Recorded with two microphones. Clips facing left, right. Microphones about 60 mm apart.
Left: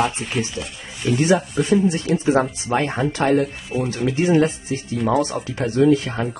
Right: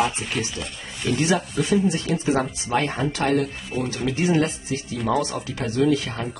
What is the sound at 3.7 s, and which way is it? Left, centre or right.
Speech, centre.